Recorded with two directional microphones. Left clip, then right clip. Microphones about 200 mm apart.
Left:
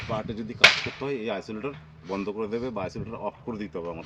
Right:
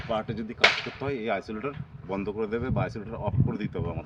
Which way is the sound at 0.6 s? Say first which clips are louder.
Left 4 dB; 60° right (ahead or behind).